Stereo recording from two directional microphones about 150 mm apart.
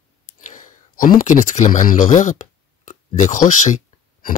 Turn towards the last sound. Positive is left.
turn(degrees=55)  # may be behind; listen again after turning